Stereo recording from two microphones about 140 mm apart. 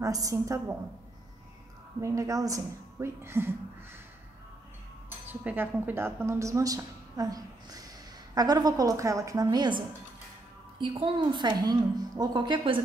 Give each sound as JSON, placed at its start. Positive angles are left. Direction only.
{"t": 0.0, "sound": "a woman's voice", "side_deg": -25}
{"t": 2.0, "sound": "a woman's voice", "side_deg": -20}
{"t": 5.3, "sound": "a woman's voice", "side_deg": -10}
{"t": 10.8, "sound": "a woman's voice", "side_deg": -40}